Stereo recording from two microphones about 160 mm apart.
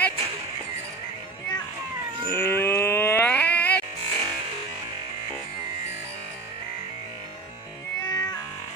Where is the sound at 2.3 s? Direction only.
15° left (ahead or behind).